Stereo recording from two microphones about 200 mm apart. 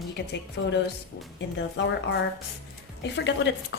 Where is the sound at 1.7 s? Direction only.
60° left (ahead or behind).